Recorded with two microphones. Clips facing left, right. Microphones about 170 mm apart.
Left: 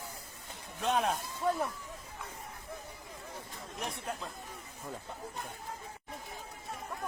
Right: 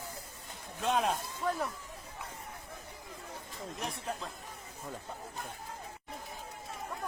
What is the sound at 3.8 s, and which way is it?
Speech, centre (ahead or behind).